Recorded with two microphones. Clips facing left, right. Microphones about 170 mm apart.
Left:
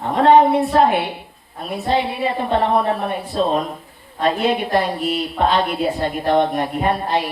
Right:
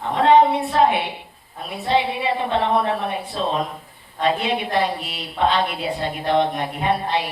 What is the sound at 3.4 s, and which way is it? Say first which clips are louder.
A woman's voice: left 5 dB; 45° left (ahead or behind).